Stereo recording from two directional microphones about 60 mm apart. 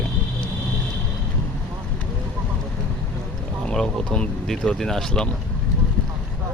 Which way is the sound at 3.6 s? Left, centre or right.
Centre.